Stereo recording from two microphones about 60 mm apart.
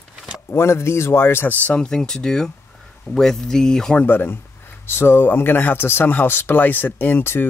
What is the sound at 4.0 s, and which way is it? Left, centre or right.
Speech, left.